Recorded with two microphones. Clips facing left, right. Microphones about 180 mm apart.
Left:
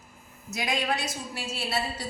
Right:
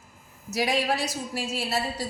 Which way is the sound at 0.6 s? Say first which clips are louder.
Right 4 dB; 35° right (ahead or behind).